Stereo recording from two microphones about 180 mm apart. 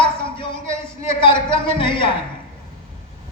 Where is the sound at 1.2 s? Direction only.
25° left (ahead or behind).